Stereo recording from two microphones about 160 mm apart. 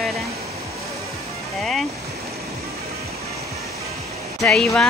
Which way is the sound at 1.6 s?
Centre (ahead or behind).